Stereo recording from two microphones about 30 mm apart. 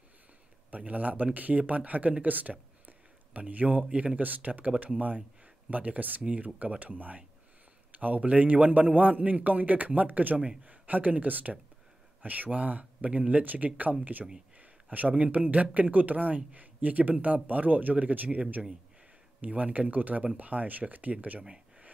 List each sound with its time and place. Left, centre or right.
0.7 s speech: right
14.6 s a sound: right
15.3 s speech: right
19.4 s speech: right